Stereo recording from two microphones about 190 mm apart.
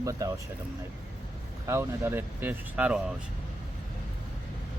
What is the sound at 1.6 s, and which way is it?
Speech, 15° right (ahead or behind).